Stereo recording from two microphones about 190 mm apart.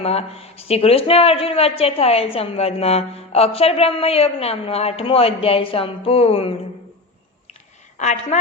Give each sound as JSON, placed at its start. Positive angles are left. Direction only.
{"t": 0.0, "sound": "speech", "side_deg": 35}
{"t": 7.9, "sound": "speech", "side_deg": 40}